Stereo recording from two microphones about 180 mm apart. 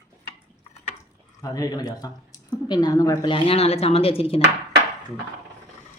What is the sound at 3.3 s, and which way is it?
Speech, 35° left (ahead or behind).